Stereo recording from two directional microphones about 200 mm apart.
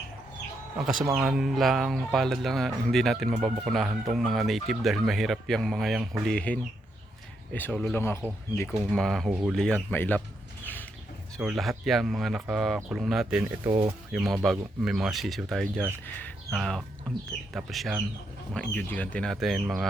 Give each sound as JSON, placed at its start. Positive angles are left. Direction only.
{"t": 0.8, "sound": "speech", "side_deg": -5}
{"t": 11.3, "sound": "speech", "side_deg": 0}
{"t": 13.7, "sound": "speech", "side_deg": -25}
{"t": 14.1, "sound": "speech", "side_deg": -5}